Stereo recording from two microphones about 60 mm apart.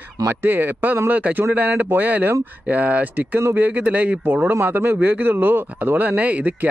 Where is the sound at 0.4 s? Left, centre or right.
Right.